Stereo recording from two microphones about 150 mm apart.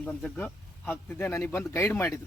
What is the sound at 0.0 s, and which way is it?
Speech, 10° left (ahead or behind).